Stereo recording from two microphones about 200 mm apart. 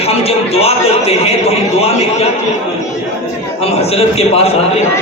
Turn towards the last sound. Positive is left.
turn(degrees=30)  # may be behind; listen again after turning